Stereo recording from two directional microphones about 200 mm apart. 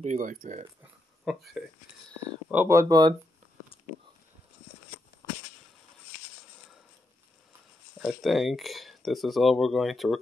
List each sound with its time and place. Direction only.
0.0 s speech: 40° right (ahead or behind)
1.2 s speech: centre (ahead or behind)
2.5 s speech: 10° right (ahead or behind)
8.0 s speech: centre (ahead or behind)